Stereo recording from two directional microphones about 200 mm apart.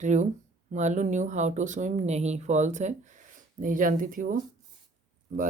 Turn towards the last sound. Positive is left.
turn(degrees=-40)  # may be behind; listen again after turning